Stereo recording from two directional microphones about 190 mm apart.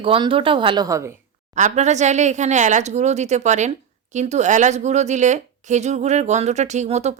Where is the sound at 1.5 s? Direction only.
40° right (ahead or behind).